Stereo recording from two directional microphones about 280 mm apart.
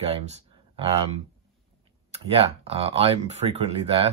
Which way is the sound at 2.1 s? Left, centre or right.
Right.